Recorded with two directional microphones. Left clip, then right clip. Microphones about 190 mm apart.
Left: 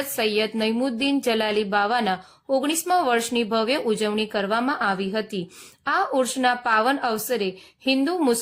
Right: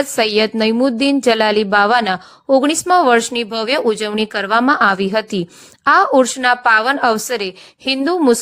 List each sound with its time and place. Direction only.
0.2 s a woman's voice: 30° right (ahead or behind)